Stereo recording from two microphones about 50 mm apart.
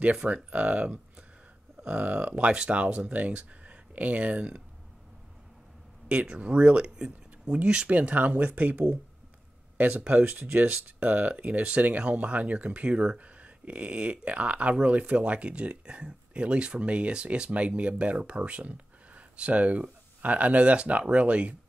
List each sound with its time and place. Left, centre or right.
0.0 s speech: right
6.0 s speech: right